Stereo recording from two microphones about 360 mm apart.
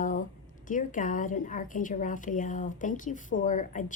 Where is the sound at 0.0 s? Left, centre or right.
Left.